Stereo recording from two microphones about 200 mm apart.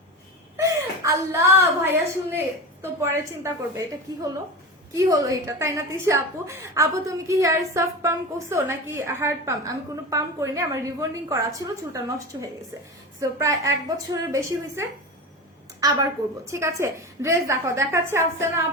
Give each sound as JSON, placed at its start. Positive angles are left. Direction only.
{"t": 0.5, "sound": "a woman's voice", "side_deg": -15}